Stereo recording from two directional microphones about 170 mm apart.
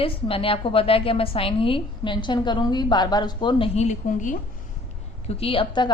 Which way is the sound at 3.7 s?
45° left (ahead or behind).